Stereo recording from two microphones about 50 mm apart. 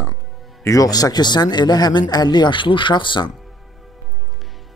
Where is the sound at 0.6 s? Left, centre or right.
Left.